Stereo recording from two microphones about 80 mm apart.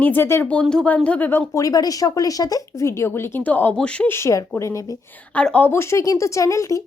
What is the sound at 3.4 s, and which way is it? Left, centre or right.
Speech, centre.